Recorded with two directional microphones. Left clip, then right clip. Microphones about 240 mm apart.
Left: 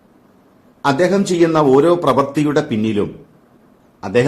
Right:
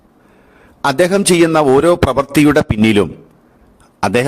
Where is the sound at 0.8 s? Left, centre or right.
Right.